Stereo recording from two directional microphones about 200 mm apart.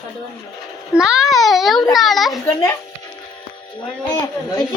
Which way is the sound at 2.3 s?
15° left (ahead or behind).